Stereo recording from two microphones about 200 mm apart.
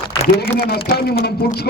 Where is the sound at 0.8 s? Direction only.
50° left (ahead or behind).